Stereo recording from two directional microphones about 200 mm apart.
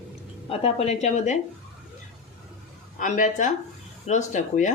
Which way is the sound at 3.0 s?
40° left (ahead or behind).